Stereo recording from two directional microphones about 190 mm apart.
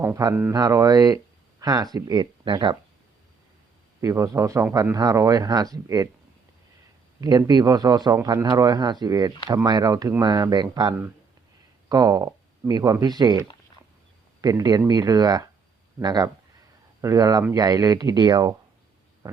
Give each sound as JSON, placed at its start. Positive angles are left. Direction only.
{"t": 0.0, "sound": "speech", "side_deg": -15}
{"t": 4.0, "sound": "speech", "side_deg": -15}
{"t": 7.2, "sound": "speech", "side_deg": -20}
{"t": 19.2, "sound": "a sound", "side_deg": -15}